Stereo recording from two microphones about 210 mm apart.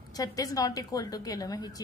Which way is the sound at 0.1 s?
15° left (ahead or behind).